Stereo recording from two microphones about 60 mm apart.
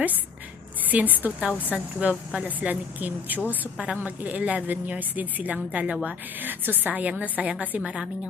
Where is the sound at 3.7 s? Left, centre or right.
Centre.